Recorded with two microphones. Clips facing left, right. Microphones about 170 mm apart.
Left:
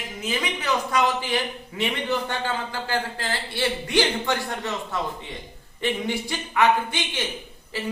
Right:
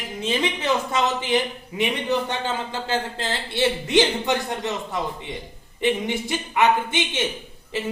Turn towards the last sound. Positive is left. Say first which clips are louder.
# right 3 dB
turn(degrees=-20)  # may be behind; listen again after turning